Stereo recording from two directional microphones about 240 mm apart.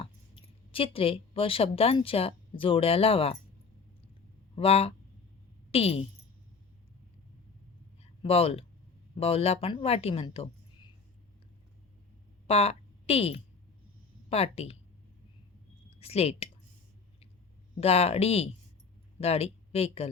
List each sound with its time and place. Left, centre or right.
0.0 s speech: left
4.5 s speech: left
8.2 s speech: left
12.5 s speech: left
16.0 s speech: left
17.7 s speech: left